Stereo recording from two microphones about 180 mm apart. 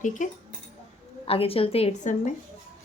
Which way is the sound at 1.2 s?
30° left (ahead or behind).